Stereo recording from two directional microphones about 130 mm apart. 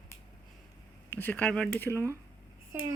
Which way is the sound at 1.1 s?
15° left (ahead or behind).